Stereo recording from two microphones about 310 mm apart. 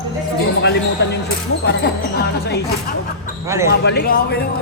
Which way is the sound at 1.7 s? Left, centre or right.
Left.